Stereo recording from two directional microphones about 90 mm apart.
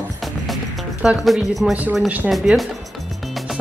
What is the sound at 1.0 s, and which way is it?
Speech, 10° right (ahead or behind).